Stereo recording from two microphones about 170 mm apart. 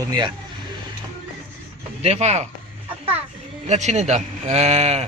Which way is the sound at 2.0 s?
40° right (ahead or behind).